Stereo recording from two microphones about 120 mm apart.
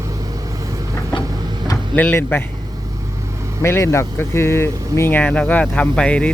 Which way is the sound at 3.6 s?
20° left (ahead or behind).